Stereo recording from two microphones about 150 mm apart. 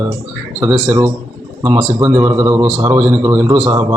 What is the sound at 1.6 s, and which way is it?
Speech, 15° right (ahead or behind).